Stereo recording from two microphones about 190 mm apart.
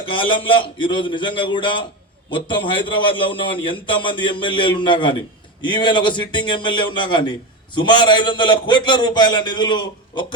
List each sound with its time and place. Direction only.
0.0 s a man's voice: 25° left (ahead or behind)